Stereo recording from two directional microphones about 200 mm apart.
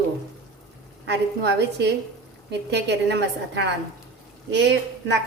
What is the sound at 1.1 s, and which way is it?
A woman's voice, 55° right (ahead or behind).